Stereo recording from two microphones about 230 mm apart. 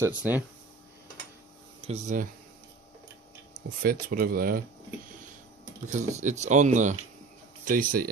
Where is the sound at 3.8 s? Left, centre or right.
Right.